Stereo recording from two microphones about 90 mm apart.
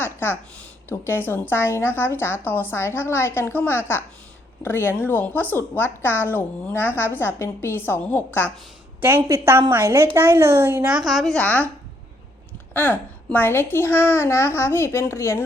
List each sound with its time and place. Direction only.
0.0 s a woman's voice: 25° left (ahead or behind)
9.0 s a woman's voice: 20° right (ahead or behind)
10.8 s a woman's voice: 10° right (ahead or behind)
11.1 s a woman's voice: centre (ahead or behind)
11.3 s speech: 15° left (ahead or behind)
12.7 s a woman's voice: 20° left (ahead or behind)